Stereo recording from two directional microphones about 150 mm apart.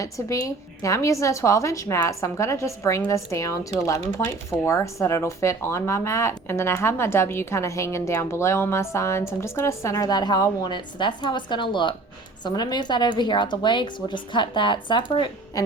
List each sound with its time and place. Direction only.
0.0 s a woman's voice: 20° left (ahead or behind)